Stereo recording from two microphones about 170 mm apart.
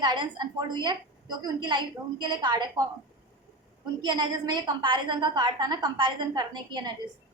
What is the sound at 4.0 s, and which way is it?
A woman's voice, 25° right (ahead or behind).